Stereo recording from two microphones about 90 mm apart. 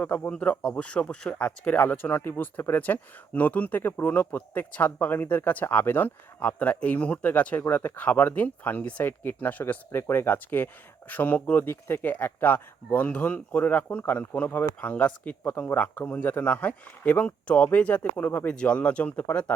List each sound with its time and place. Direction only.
0.0 s speech: 15° left (ahead or behind)